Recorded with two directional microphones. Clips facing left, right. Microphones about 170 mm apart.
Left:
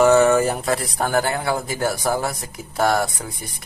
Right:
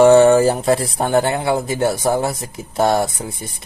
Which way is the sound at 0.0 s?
30° right (ahead or behind).